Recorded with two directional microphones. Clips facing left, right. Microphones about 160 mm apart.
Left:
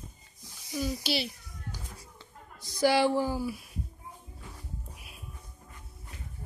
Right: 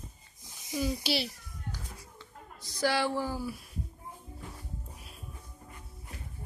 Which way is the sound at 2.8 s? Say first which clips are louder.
Left 5 dB; 15° left (ahead or behind).